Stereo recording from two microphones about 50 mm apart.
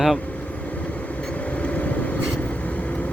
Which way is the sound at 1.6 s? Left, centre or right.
Left.